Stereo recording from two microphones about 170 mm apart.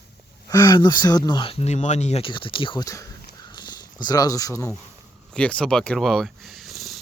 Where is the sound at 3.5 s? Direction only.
25° left (ahead or behind).